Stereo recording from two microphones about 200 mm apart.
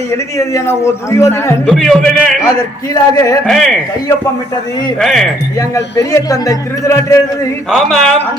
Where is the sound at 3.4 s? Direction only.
Centre (ahead or behind).